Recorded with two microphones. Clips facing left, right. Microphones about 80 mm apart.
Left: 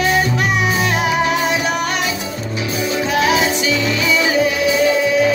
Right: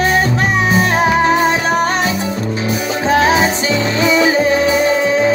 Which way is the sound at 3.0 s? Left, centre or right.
Right.